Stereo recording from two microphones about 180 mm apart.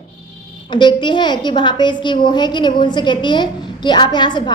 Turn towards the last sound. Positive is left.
turn(degrees=25)  # may be behind; listen again after turning